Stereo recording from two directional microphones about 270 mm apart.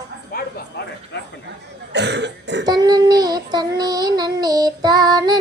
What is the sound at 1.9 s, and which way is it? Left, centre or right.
Cough, right.